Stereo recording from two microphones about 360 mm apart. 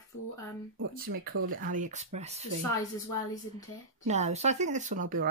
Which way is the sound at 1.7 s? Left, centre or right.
Centre.